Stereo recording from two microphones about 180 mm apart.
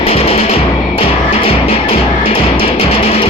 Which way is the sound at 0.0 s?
35° left (ahead or behind).